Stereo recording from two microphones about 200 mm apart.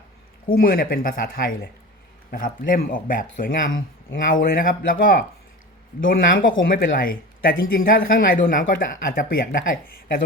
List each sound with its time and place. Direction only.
0.4 s speech: 45° left (ahead or behind)